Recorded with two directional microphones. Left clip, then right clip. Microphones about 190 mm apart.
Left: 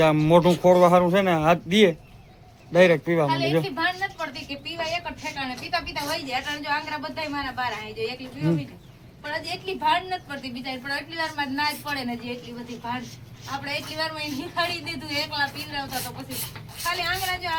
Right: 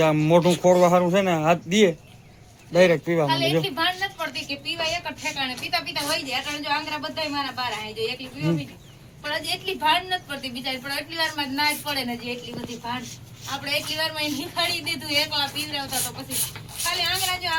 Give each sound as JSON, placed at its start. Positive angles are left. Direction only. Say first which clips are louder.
{"t": 0.0, "sound": "a man's voice", "louder": "left 1 dB", "side_deg": 5}
{"t": 3.2, "sound": "a woman's voice", "louder": "right 1 dB", "side_deg": 15}
{"t": 13.5, "sound": "a woman's voice", "louder": "right 4 dB", "side_deg": 10}
{"t": 16.0, "sound": "a man's voice", "louder": "right 3 dB", "side_deg": 0}